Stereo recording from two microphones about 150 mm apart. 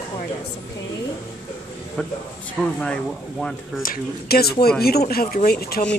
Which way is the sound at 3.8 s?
80° left.